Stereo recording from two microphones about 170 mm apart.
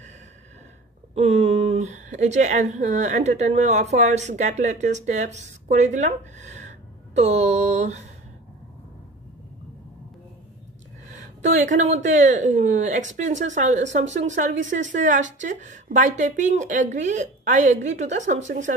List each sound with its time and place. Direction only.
1.1 s a woman's voice: 40° right (ahead or behind)
7.2 s a sound: 40° right (ahead or behind)
11.4 s speech: 45° right (ahead or behind)